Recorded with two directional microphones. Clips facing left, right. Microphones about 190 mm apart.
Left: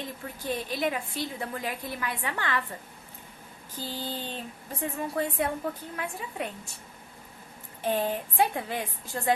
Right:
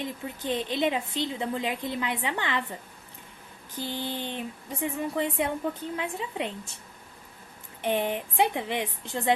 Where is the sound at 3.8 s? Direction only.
20° right (ahead or behind).